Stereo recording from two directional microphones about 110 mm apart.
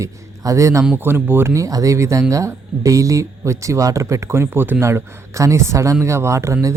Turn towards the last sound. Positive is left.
turn(degrees=-25)  # may be behind; listen again after turning